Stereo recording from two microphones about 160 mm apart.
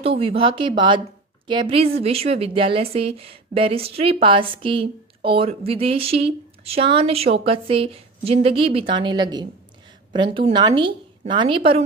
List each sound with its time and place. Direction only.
0.0 s speech: 35° right (ahead or behind)